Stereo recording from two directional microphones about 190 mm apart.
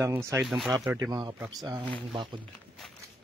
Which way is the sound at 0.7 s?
20° right (ahead or behind).